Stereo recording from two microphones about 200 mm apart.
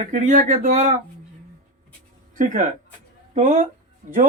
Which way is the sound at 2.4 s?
40° right (ahead or behind).